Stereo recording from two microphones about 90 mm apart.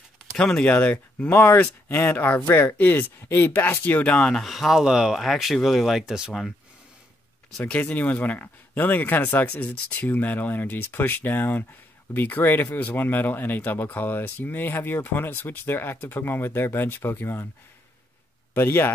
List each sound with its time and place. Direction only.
0.3 s speech: 5° left (ahead or behind)
7.5 s speech: 15° left (ahead or behind)
18.5 s a man's voice: 25° left (ahead or behind)